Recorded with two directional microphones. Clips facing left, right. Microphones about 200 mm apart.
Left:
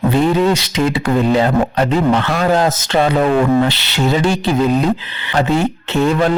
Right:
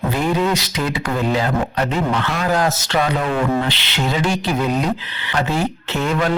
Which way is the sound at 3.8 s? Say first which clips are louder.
Left 5 dB; 40° left (ahead or behind).